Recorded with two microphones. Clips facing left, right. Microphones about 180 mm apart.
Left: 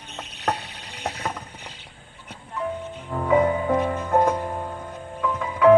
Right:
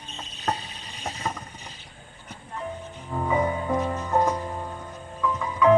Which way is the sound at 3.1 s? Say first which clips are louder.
Left 5 dB; 60° left (ahead or behind).